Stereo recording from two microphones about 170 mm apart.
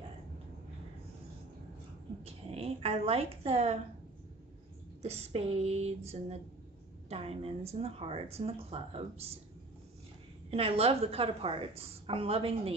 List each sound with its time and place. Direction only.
2.2 s a woman's voice: 35° right (ahead or behind)
5.0 s speech: 40° right (ahead or behind)
10.5 s speech: 35° right (ahead or behind)